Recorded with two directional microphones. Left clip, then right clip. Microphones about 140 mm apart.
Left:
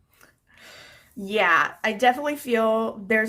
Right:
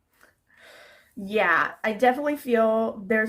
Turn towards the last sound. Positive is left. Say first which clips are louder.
# left 1 dB
turn(degrees=25)  # may be behind; listen again after turning